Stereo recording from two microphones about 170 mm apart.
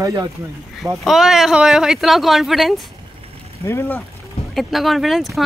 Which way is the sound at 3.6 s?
15° left (ahead or behind).